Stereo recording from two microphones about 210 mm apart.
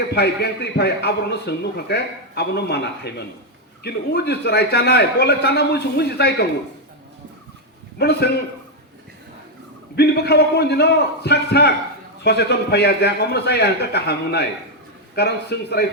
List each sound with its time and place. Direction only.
0.1 s a man's voice: 50° left (ahead or behind)
7.9 s a man's voice: 50° left (ahead or behind)
9.9 s a man's voice: 50° left (ahead or behind)